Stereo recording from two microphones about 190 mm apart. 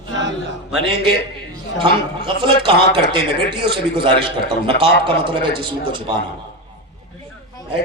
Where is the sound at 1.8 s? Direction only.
25° right (ahead or behind).